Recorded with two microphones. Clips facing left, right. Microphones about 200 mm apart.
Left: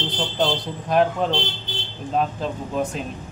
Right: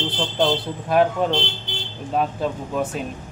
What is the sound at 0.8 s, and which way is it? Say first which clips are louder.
Speech: right 1 dB; 5° right (ahead or behind).